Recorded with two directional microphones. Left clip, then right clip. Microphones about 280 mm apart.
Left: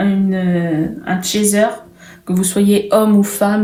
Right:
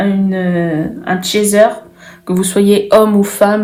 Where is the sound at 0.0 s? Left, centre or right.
Right.